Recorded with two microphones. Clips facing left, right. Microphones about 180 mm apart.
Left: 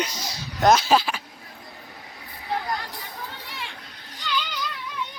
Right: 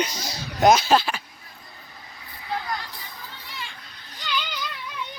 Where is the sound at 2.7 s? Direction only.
55° left (ahead or behind).